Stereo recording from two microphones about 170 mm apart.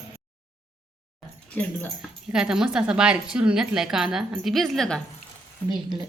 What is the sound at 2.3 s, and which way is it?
Speech, 5° right (ahead or behind).